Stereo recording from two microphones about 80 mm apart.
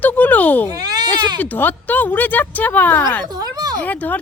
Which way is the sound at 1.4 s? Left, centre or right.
Left.